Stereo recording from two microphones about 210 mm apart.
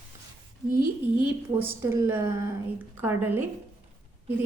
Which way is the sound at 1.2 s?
10° right (ahead or behind).